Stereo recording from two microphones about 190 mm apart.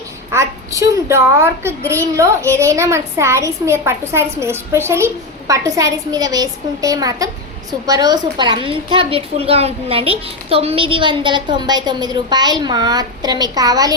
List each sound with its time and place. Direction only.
0.3 s a child's voice: 15° right (ahead or behind)